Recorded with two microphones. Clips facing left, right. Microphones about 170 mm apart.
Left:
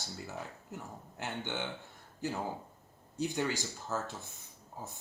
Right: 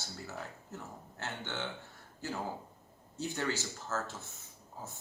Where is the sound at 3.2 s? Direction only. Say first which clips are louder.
Left 2 dB; 15° left (ahead or behind).